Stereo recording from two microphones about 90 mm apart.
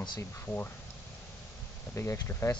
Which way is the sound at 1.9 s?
35° left (ahead or behind).